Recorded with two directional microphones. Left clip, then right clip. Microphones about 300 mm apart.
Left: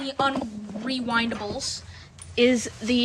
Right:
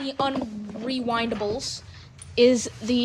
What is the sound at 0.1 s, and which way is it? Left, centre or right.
A woman's voice, centre.